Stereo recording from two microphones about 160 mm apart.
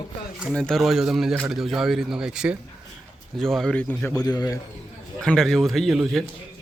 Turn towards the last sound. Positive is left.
turn(degrees=0)  # may be behind; listen again after turning